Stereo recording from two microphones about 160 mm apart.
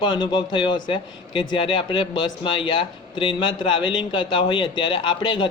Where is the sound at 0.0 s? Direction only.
30° left (ahead or behind).